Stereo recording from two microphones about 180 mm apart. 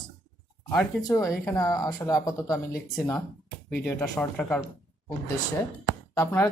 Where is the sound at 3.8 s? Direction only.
15° left (ahead or behind).